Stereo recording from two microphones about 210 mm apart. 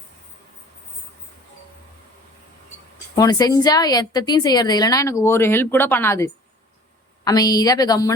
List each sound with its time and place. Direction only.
3.2 s a woman's voice: 20° left (ahead or behind)